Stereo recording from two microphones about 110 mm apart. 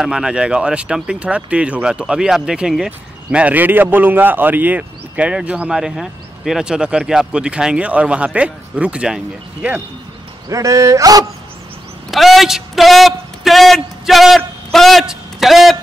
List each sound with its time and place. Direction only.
0.0 s speech: 5° right (ahead or behind)
10.5 s speech: 30° right (ahead or behind)
12.1 s a sound: centre (ahead or behind)